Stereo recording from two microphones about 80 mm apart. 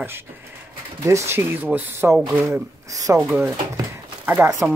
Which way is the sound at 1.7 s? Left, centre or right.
Right.